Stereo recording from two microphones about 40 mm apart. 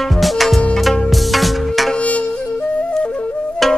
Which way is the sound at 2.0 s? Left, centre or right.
Left.